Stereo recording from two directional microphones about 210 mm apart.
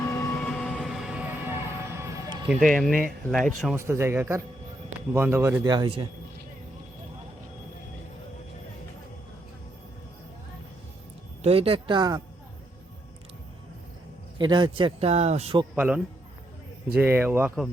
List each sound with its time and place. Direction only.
0.0 s music: 15° left (ahead or behind); by 2.4 s 15° right (ahead or behind)
2.5 s speech: centre (ahead or behind)
3.8 s a man's voice: 10° right (ahead or behind)
11.4 s speech: 25° right (ahead or behind)
14.3 s speech: 20° right (ahead or behind)
15.7 s a man's voice: 5° right (ahead or behind)